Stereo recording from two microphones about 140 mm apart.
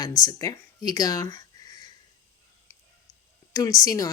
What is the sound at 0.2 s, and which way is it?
Speech, 25° left (ahead or behind).